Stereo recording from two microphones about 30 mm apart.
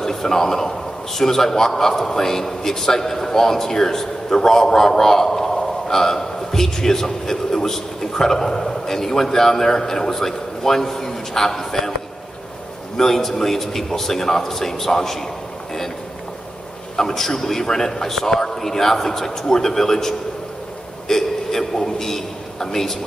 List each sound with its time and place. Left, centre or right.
0.0 s a man's voice: centre
12.9 s a man's voice: centre
16.9 s a man's voice: centre